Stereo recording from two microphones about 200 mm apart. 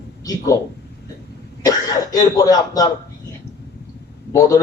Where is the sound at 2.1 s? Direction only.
20° left (ahead or behind).